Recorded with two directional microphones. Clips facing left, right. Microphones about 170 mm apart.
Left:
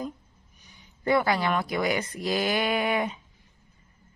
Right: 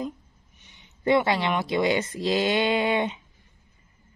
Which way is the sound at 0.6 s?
25° right (ahead or behind).